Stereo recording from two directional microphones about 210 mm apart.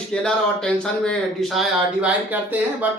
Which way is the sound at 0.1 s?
5° left (ahead or behind).